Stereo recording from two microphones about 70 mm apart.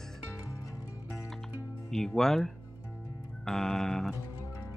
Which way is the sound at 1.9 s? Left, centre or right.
Centre.